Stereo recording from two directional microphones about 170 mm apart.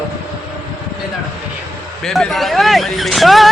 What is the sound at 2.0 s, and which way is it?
A man's voice, centre (ahead or behind).